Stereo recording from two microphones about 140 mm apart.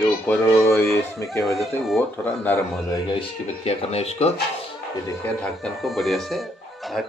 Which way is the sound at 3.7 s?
45° left (ahead or behind).